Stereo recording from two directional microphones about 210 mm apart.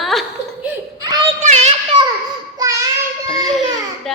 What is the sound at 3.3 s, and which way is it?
Speech, centre (ahead or behind).